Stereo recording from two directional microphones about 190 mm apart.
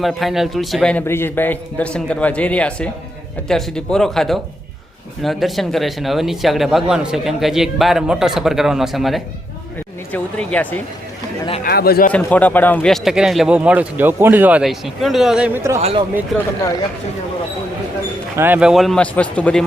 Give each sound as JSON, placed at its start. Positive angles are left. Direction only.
{"t": 0.0, "sound": "speech", "side_deg": 0}
{"t": 11.6, "sound": "a man's voice", "side_deg": 55}
{"t": 12.1, "sound": "speech", "side_deg": 10}
{"t": 15.8, "sound": "speech", "side_deg": -30}
{"t": 18.3, "sound": "speech", "side_deg": -10}